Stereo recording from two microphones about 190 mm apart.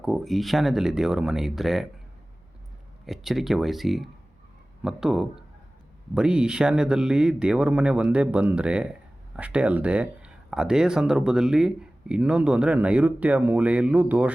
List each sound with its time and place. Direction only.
0.0 s speech: centre (ahead or behind)
3.1 s speech: centre (ahead or behind)